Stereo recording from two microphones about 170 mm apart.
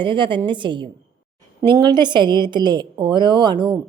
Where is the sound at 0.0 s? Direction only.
30° right (ahead or behind).